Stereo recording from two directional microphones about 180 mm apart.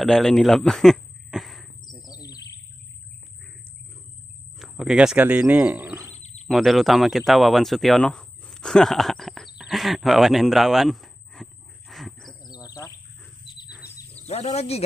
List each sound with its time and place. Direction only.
0.0 s speech: 5° left (ahead or behind)
1.9 s bird: 20° left (ahead or behind)
4.6 s speech: 5° right (ahead or behind)
6.1 s bird: 40° left (ahead or behind)
6.4 s speech: centre (ahead or behind)
11.9 s wild animals: centre (ahead or behind)
12.4 s bird: 20° left (ahead or behind)
14.2 s speech: 40° left (ahead or behind)